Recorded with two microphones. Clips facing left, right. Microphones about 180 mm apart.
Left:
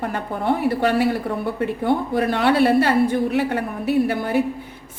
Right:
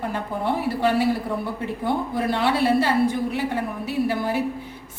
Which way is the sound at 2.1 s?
65° left (ahead or behind).